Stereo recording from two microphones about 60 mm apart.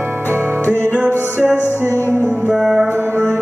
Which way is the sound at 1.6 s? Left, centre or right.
Left.